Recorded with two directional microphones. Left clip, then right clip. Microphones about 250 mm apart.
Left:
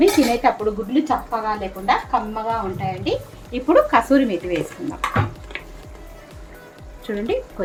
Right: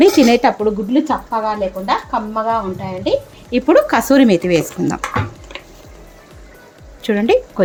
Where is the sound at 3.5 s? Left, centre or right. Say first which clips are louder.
Right 3 dB; right.